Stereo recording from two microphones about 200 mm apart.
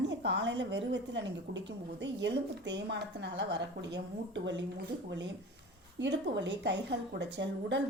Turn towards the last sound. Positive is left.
turn(degrees=-60)  # may be behind; listen again after turning